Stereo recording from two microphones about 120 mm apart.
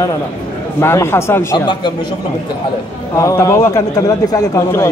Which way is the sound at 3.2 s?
25° left (ahead or behind).